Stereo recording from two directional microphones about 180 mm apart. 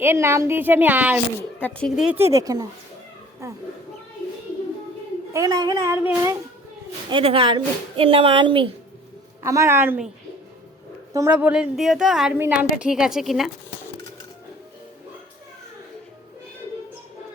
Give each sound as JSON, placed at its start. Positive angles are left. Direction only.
{"t": 0.0, "sound": "a woman's voice", "side_deg": -15}
{"t": 1.6, "sound": "a woman's voice", "side_deg": 5}
{"t": 2.3, "sound": "speech", "side_deg": -20}
{"t": 5.3, "sound": "a woman's voice", "side_deg": -20}
{"t": 7.1, "sound": "speech", "side_deg": -30}
{"t": 9.4, "sound": "a woman's voice", "side_deg": -15}
{"t": 11.1, "sound": "a woman's voice", "side_deg": -10}